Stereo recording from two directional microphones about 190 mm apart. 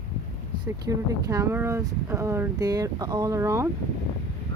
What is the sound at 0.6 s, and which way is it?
Speech, 20° right (ahead or behind).